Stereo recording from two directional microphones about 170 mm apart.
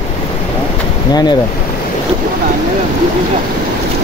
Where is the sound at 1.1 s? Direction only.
25° left (ahead or behind).